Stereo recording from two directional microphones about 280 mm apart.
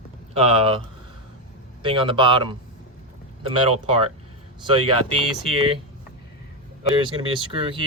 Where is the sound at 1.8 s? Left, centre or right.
Centre.